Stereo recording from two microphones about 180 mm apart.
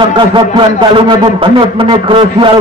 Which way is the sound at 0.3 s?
30° right (ahead or behind).